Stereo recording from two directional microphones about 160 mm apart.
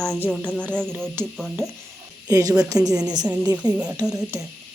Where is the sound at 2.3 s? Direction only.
20° right (ahead or behind).